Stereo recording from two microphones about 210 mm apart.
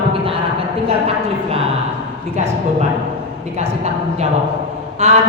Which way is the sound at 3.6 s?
30° right (ahead or behind).